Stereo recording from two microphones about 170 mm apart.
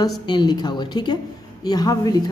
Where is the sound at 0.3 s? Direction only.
25° left (ahead or behind).